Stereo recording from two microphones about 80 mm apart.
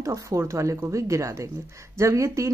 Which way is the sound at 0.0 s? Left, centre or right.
Right.